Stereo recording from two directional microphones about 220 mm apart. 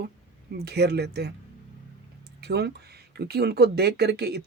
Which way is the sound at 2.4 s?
50° right (ahead or behind).